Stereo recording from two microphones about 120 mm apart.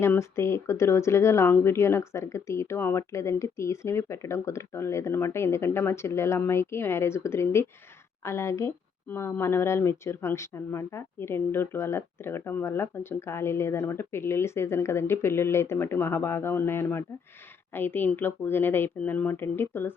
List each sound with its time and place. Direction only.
0.0 s speech: 20° left (ahead or behind)